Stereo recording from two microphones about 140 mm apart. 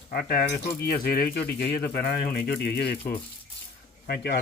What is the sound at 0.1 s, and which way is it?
Speech, 90° left.